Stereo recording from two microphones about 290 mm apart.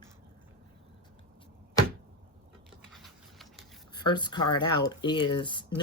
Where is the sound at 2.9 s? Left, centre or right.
Centre.